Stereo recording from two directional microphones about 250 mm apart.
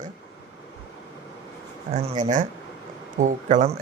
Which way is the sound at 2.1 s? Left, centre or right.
Right.